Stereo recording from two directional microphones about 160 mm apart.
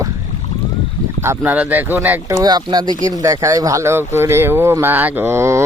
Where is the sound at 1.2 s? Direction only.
15° right (ahead or behind).